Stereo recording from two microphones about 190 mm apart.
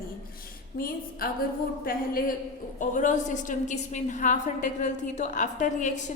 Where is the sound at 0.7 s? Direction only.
50° left (ahead or behind).